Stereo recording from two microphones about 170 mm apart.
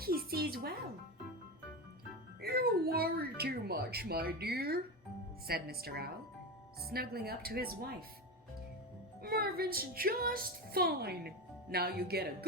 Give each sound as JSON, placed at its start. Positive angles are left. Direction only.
{"t": 0.0, "sound": "music", "side_deg": -60}
{"t": 2.4, "sound": "speech", "side_deg": -65}
{"t": 5.5, "sound": "music", "side_deg": -65}
{"t": 9.2, "sound": "music", "side_deg": -65}